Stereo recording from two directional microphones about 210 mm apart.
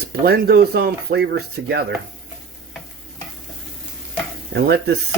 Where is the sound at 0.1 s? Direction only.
50° right (ahead or behind).